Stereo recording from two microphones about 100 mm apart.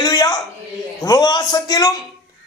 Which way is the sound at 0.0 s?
40° left (ahead or behind).